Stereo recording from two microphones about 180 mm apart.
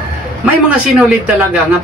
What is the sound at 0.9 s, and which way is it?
Speech, 5° right (ahead or behind).